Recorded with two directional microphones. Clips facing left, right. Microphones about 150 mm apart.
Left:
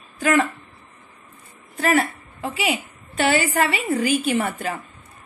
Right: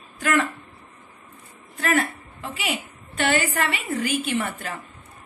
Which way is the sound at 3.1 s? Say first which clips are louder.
Left 3 dB; 40° left (ahead or behind).